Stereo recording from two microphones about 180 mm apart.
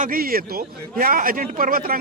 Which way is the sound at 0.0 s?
55° right (ahead or behind).